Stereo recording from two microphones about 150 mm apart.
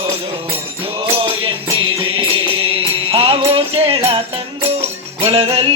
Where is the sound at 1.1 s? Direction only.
35° right (ahead or behind).